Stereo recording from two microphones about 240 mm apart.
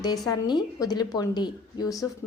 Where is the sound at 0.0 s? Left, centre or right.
Centre.